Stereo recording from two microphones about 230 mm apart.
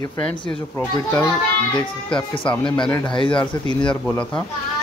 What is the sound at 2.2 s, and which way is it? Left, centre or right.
Speech, left.